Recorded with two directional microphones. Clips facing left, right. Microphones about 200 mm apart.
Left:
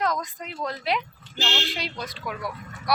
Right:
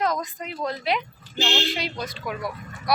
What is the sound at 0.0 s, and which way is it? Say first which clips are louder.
Speech: right 2 dB; centre (ahead or behind).